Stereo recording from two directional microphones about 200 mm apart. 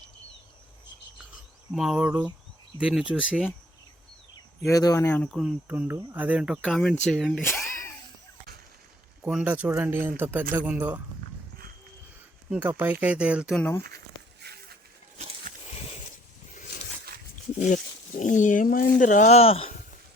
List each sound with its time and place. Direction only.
1.7 s speech: centre (ahead or behind)
4.7 s speech: 15° left (ahead or behind); by 7.4 s centre (ahead or behind)
7.4 s a sound: 15° left (ahead or behind)
9.2 s speech: 5° right (ahead or behind)
12.6 s speech: 10° right (ahead or behind)
13.6 s speech: 10° left (ahead or behind)
14.4 s a sound: 55° right (ahead or behind)
18.2 s speech: 40° left (ahead or behind)